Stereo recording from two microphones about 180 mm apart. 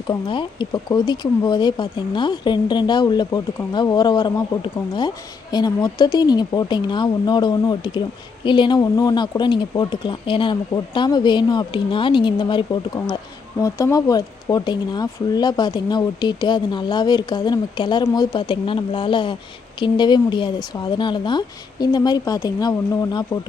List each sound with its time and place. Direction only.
0.1 s speech: 25° left (ahead or behind)